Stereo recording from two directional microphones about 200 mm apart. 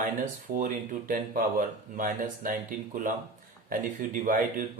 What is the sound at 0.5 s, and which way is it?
Speech, 45° right (ahead or behind).